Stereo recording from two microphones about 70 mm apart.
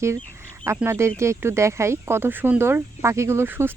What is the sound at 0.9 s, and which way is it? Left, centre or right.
Speech, right.